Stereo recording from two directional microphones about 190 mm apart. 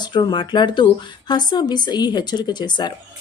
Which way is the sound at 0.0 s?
20° left (ahead or behind).